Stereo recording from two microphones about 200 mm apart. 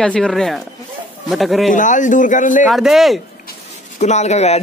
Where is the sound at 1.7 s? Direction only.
40° left (ahead or behind).